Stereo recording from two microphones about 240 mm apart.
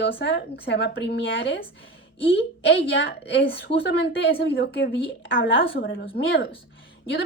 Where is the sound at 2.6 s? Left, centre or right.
Left.